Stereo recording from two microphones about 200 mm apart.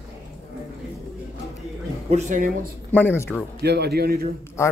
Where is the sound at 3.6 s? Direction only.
55° right (ahead or behind).